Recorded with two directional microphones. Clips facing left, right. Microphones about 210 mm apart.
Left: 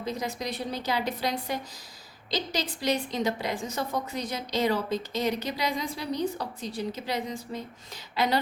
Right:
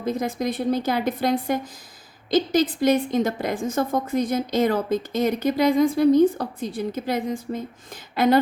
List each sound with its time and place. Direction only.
0.0 s a woman's voice: 50° right (ahead or behind)